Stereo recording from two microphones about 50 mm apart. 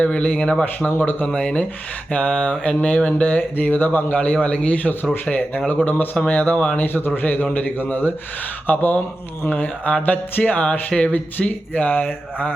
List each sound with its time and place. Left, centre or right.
0.0 s mantra: left
0.6 s speech: left
1.4 s mantra: left
3.1 s speech: left
6.7 s a man's voice: left